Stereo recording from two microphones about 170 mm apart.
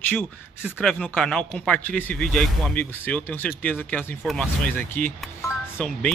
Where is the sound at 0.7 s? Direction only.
10° left (ahead or behind).